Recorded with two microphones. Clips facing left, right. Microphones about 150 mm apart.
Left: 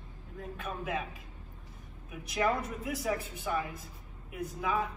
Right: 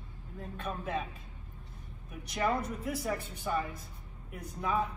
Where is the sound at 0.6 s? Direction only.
5° left (ahead or behind).